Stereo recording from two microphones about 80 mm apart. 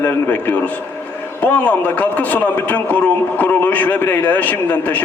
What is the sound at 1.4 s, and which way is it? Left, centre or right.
A man's voice, centre.